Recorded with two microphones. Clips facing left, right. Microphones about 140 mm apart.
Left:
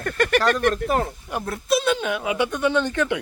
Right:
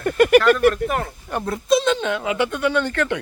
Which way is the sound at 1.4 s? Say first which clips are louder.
Right 4 dB; centre (ahead or behind).